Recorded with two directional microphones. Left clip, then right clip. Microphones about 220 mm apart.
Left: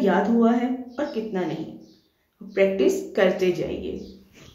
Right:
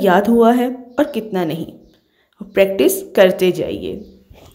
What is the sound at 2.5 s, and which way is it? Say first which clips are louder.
A woman's voice: right 6 dB; 50° right (ahead or behind).